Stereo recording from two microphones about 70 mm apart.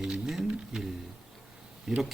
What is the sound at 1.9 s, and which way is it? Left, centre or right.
Speech, centre.